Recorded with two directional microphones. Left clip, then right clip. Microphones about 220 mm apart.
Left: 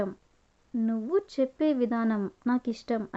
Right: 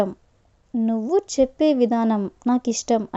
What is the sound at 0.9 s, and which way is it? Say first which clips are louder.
A woman's voice: right 7 dB; 25° right (ahead or behind).